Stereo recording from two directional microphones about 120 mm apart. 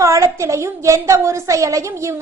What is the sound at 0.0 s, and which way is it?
A woman's voice, 25° right (ahead or behind).